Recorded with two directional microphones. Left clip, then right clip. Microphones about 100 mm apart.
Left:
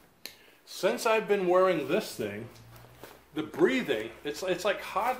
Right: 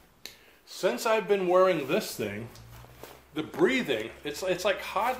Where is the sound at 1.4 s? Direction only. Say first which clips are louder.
Right 3 dB; centre (ahead or behind).